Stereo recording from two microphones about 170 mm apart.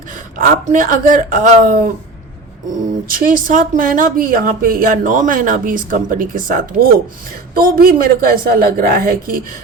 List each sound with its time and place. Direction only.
0.3 s speech: 50° right (ahead or behind)
3.1 s a woman's voice: 55° right (ahead or behind)